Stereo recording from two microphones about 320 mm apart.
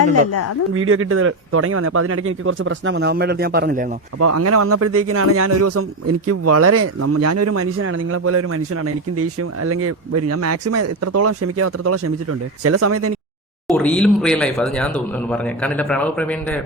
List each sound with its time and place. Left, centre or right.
0.0 s speech: left
0.7 s speech: right
4.2 s a man's voice: right
13.7 s speech: centre